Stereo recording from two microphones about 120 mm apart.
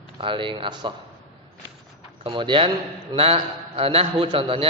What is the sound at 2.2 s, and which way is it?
Speech, 45° right (ahead or behind).